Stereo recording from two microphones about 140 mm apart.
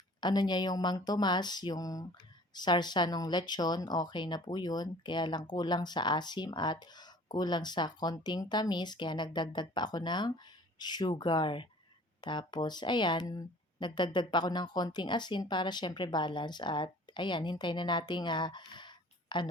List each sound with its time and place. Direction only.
0.2 s a woman's voice: 30° left (ahead or behind)